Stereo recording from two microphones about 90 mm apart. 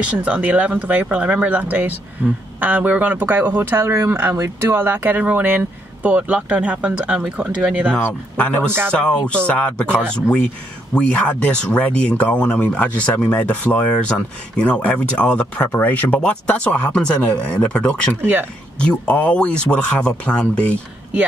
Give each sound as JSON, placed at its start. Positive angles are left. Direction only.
{"t": 0.2, "sound": "speech", "side_deg": -15}
{"t": 8.0, "sound": "speech", "side_deg": 15}
{"t": 18.2, "sound": "speech", "side_deg": -25}
{"t": 18.8, "sound": "speech", "side_deg": 15}